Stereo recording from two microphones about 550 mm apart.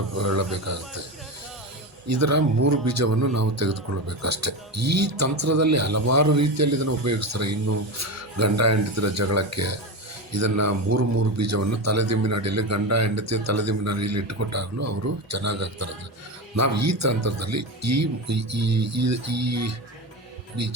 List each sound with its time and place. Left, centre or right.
0.2 s speech: right
2.0 s speech: right